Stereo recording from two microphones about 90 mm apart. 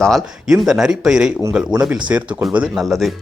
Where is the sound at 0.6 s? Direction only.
5° right (ahead or behind).